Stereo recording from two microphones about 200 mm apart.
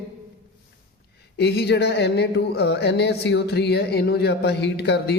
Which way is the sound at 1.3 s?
55° left (ahead or behind).